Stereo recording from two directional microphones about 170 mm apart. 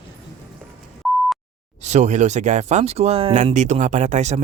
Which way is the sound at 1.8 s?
45° right (ahead or behind).